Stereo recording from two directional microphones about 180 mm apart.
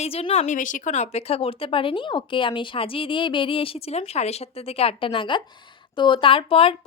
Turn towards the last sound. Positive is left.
turn(degrees=30)  # may be behind; listen again after turning